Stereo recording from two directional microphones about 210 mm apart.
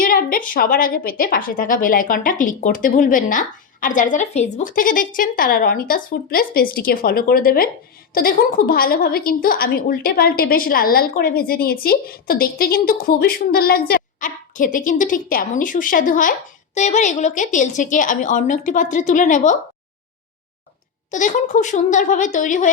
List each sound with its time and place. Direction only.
0.0 s a woman's voice: 40° left (ahead or behind)
21.1 s a woman's voice: 35° left (ahead or behind)